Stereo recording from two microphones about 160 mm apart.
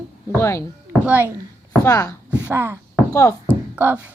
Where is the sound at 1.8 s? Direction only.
20° left (ahead or behind).